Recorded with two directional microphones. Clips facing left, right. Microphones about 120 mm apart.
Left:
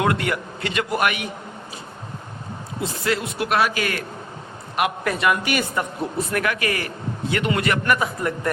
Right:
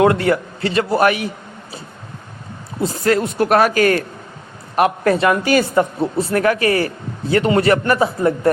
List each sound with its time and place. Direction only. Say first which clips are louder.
0.0 s a man's voice: right 8 dB; 30° right (ahead or behind)
2.8 s a man's voice: right 7 dB; 45° right (ahead or behind)